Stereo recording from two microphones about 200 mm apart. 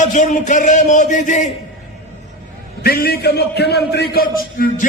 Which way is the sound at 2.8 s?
50° left (ahead or behind).